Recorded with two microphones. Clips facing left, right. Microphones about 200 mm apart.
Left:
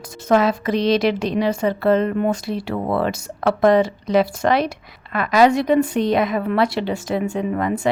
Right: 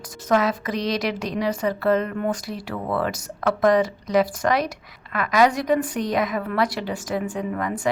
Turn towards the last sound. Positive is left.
turn(degrees=25)  # may be behind; listen again after turning